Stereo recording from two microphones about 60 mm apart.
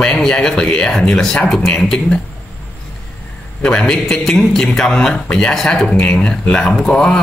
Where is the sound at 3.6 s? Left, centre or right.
Centre.